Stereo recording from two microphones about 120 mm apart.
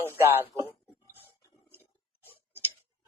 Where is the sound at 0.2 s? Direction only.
20° right (ahead or behind).